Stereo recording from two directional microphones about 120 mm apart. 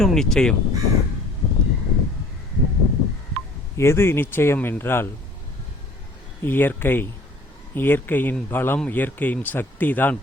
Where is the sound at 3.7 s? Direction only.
20° left (ahead or behind).